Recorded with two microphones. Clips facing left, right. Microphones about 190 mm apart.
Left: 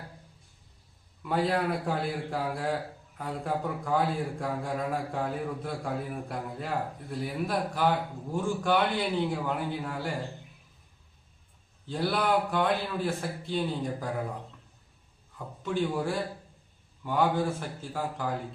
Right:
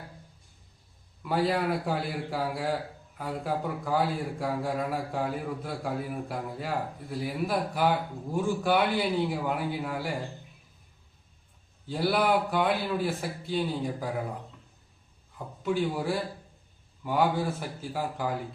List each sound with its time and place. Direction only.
1.2 s a man's voice: 5° right (ahead or behind)
11.9 s a man's voice: 5° right (ahead or behind)
15.6 s a man's voice: 5° right (ahead or behind)